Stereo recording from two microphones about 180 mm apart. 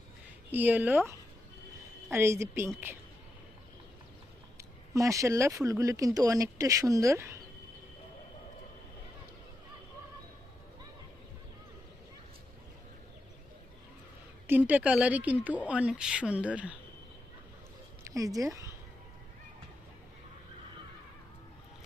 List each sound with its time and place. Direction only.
0.5 s speech: 10° right (ahead or behind)
4.5 s speech: 15° right (ahead or behind)
14.4 s speech: 10° right (ahead or behind)
18.1 s a woman's voice: 20° right (ahead or behind)